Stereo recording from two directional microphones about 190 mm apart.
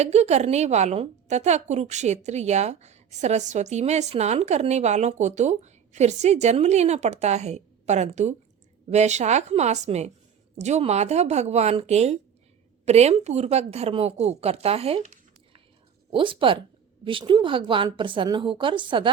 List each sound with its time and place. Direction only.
0.0 s a woman's voice: 35° right (ahead or behind)
16.1 s a woman's voice: 25° right (ahead or behind)